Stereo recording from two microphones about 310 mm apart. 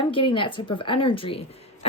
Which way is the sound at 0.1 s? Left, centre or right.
Centre.